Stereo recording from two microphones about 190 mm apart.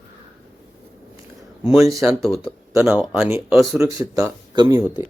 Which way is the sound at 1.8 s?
15° right (ahead or behind).